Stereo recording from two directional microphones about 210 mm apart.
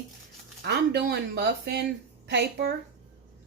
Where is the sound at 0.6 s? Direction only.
50° right (ahead or behind).